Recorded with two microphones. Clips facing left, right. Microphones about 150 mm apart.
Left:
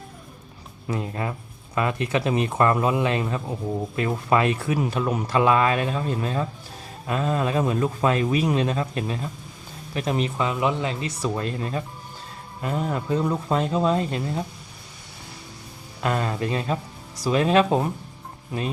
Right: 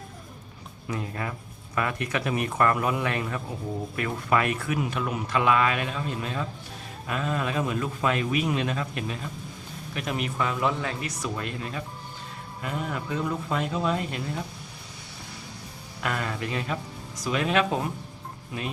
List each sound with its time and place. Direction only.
0.9 s speech: 25° left (ahead or behind)
16.0 s speech: 30° left (ahead or behind)